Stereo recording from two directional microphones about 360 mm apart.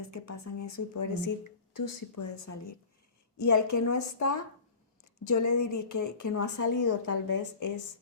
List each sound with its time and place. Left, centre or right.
0.1 s a woman's voice: left